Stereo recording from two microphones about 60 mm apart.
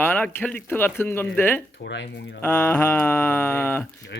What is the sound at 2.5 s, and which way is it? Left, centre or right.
Music, left.